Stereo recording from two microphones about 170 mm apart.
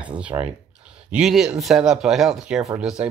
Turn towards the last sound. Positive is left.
turn(degrees=-5)  # may be behind; listen again after turning